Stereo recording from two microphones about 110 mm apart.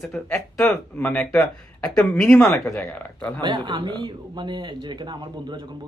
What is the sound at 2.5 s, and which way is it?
Speech, 25° left (ahead or behind).